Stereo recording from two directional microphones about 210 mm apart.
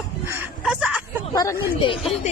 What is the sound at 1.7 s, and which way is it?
Speech, 25° left (ahead or behind).